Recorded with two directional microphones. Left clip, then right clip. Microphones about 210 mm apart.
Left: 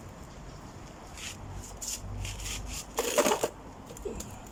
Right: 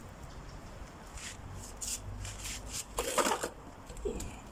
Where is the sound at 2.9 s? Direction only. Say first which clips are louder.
Left 5 dB; 15° left (ahead or behind).